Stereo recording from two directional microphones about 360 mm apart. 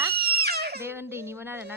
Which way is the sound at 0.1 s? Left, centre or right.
Right.